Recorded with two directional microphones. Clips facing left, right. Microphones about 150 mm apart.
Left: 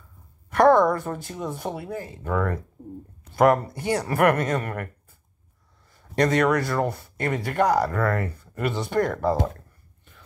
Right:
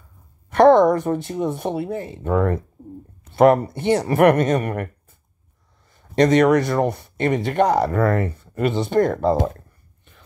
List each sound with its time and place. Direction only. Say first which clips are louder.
0.5 s speech: right 5 dB; 20° right (ahead or behind)
5.9 s speech: right 6 dB; 20° right (ahead or behind)